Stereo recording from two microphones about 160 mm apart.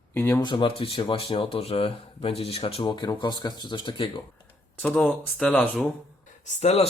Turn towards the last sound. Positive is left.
turn(degrees=45)  # may be behind; listen again after turning